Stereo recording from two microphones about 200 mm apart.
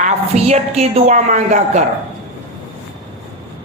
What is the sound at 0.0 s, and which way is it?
A woman's voice, 35° right (ahead or behind).